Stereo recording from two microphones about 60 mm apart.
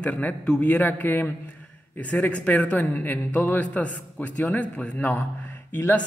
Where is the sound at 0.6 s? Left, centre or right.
Left.